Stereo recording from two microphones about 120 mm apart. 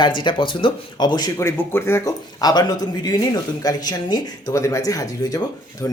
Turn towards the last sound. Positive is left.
turn(degrees=30)  # may be behind; listen again after turning